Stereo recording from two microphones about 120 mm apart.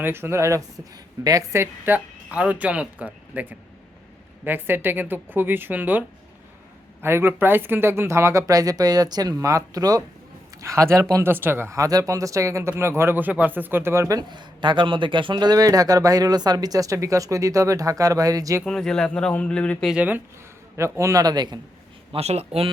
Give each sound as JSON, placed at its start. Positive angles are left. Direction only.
{"t": 0.0, "sound": "speech", "side_deg": -20}
{"t": 18.6, "sound": "speech", "side_deg": 5}
{"t": 19.9, "sound": "speech", "side_deg": -15}
{"t": 20.7, "sound": "speech", "side_deg": -25}
{"t": 22.1, "sound": "speech", "side_deg": -60}